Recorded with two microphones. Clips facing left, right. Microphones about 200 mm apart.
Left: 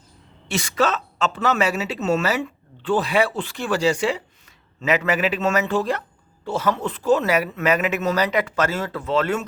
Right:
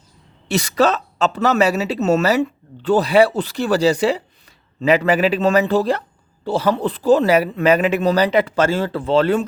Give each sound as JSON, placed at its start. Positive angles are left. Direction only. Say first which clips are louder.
{"t": 0.4, "sound": "speech", "louder": "right 5 dB", "side_deg": -40}